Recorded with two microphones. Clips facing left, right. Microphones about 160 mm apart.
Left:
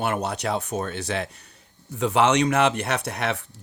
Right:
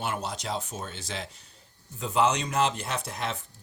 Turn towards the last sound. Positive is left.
turn(degrees=70)  # may be behind; listen again after turning